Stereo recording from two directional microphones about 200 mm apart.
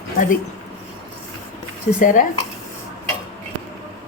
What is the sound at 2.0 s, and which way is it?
Speech, 40° left (ahead or behind).